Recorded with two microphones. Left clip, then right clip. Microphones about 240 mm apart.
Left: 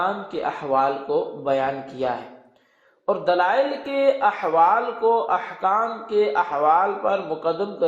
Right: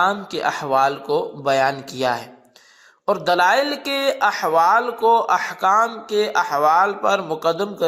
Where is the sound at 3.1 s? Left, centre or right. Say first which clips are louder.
Right 3 dB; right.